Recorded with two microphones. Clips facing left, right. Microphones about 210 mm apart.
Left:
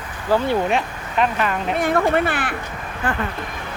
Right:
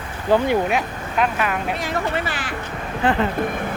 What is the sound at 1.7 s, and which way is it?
Speech, 55° left (ahead or behind).